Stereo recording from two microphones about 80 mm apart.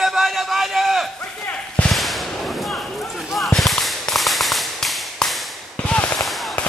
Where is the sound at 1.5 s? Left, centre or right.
Centre.